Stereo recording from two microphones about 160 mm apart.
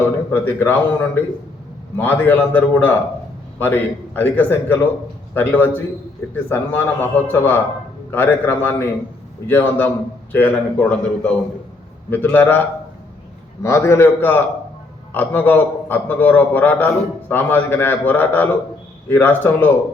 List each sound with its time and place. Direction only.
0.3 s a man's voice: 15° left (ahead or behind)